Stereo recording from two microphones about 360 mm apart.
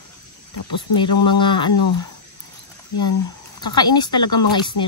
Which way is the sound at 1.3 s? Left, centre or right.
Centre.